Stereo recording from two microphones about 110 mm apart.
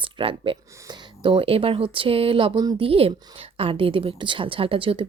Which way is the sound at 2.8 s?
60° right (ahead or behind).